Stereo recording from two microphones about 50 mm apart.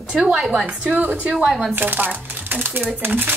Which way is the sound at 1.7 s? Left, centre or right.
Right.